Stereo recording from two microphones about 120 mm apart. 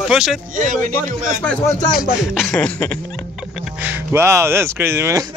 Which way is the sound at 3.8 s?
20° right (ahead or behind).